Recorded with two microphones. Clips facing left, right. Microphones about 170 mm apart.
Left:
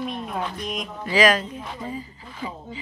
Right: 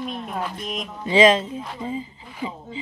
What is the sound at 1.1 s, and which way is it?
Speech, 25° right (ahead or behind).